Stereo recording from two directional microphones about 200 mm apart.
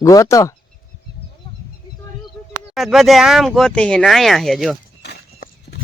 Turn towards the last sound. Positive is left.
turn(degrees=60)  # may be behind; listen again after turning